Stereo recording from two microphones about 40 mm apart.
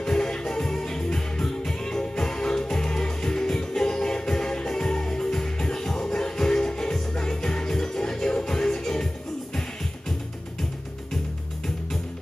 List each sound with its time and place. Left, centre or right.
0.0 s music: centre